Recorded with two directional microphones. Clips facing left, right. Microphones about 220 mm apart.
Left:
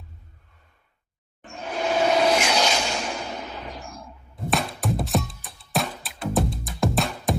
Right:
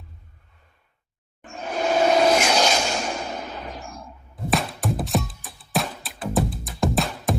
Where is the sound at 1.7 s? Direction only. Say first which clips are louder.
Right 2 dB; 45° right (ahead or behind).